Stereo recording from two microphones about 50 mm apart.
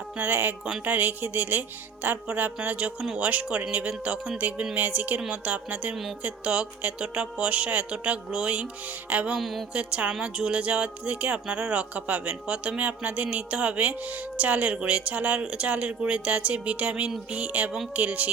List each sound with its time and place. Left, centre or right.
0.2 s speech: right
5.9 s a woman's voice: centre
6.2 s speech: right
9.4 s a woman's voice: centre
9.7 s speech: right